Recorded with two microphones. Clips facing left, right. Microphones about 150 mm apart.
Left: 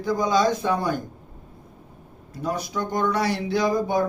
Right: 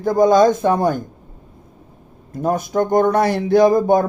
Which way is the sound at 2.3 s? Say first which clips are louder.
Right 8 dB; 50° right (ahead or behind).